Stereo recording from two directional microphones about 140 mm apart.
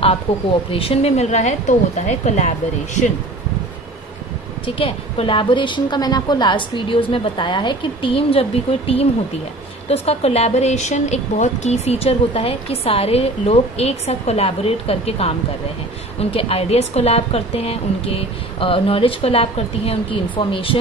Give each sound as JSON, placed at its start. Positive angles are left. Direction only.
{"t": 0.3, "sound": "a woman's voice", "side_deg": 45}
{"t": 4.6, "sound": "a woman's voice", "side_deg": 40}